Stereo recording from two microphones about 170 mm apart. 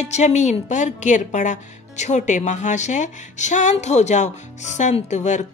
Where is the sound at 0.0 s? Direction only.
40° left (ahead or behind).